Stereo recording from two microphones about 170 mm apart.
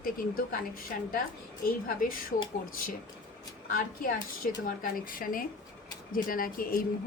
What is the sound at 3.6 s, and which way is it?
A woman's voice, 55° left (ahead or behind).